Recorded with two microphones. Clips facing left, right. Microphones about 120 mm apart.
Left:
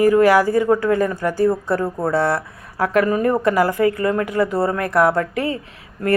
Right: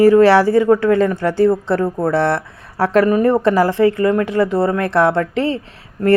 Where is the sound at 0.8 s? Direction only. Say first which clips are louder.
Right 4 dB; 20° left (ahead or behind).